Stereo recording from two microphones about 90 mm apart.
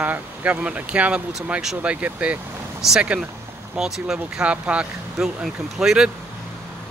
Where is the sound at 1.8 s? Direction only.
15° right (ahead or behind).